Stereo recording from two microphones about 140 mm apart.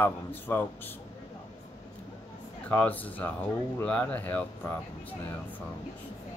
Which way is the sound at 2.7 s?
10° left (ahead or behind).